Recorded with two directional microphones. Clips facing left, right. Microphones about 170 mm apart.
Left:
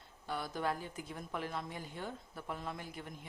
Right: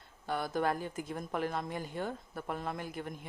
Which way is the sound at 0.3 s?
50° right (ahead or behind).